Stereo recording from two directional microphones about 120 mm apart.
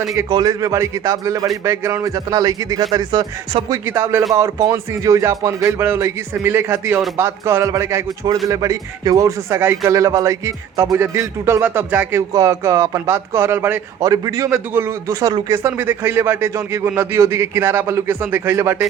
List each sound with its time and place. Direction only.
0.3 s a man's voice: 35° right (ahead or behind)
3.8 s a man's voice: 20° right (ahead or behind)
15.5 s a man's voice: 20° right (ahead or behind)